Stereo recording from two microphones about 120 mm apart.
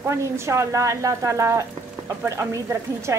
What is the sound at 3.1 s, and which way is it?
Speech, 20° right (ahead or behind).